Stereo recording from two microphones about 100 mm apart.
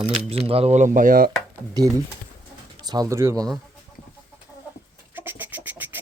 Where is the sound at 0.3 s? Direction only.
80° right.